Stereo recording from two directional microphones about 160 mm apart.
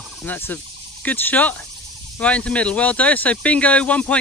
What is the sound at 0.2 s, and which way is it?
Speech, 10° left (ahead or behind).